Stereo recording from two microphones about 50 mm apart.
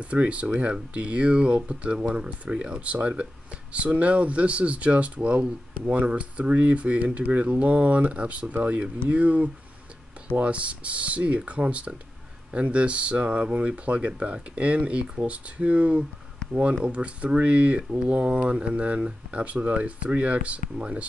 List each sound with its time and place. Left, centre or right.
0.0 s speech: right